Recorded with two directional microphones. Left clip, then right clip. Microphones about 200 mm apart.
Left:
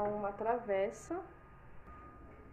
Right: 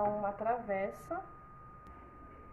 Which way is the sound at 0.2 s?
40° left (ahead or behind).